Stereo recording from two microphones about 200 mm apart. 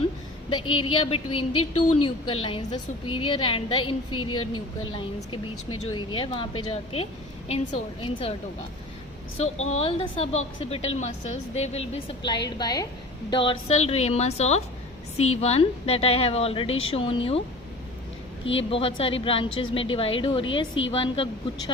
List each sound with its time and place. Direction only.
0.6 s a woman's voice: 90° left
0.9 s a woman's voice: 25° left (ahead or behind)
4.1 s a woman's voice: 90° left
4.9 s a woman's voice: 25° left (ahead or behind)
9.4 s a woman's voice: 30° left (ahead or behind)
18.5 s a woman's voice: 30° left (ahead or behind)